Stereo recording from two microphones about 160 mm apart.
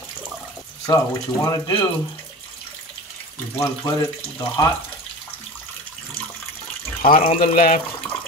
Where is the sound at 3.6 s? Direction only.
20° left (ahead or behind).